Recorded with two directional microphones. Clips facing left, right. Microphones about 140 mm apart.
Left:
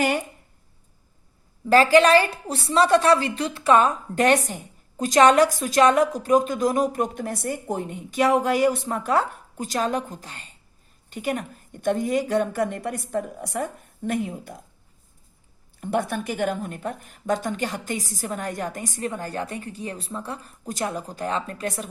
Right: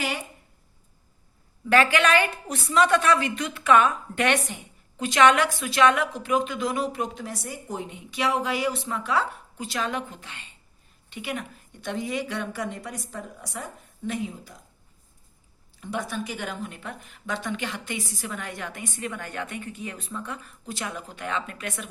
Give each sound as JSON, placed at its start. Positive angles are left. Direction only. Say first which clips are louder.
{"t": 1.6, "sound": "a woman's voice", "louder": "left 5 dB", "side_deg": 35}
{"t": 15.8, "sound": "a woman's voice", "louder": "left 6 dB", "side_deg": 55}